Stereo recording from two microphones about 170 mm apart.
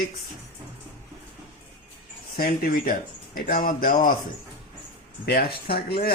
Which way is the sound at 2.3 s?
55° left (ahead or behind).